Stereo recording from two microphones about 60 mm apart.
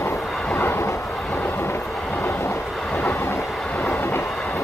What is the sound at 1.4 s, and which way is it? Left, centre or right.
Train, left.